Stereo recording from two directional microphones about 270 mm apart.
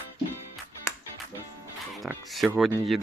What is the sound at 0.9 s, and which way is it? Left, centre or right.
Music, centre.